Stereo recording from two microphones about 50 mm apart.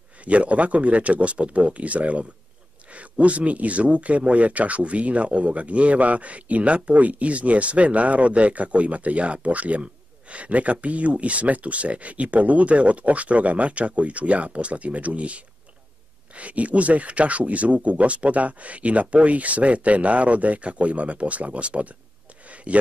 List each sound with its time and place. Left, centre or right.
0.2 s speech: right